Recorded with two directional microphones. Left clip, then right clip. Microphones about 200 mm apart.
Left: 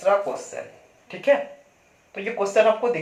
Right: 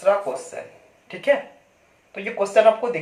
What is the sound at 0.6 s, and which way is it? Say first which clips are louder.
Speech: even; 10° right (ahead or behind).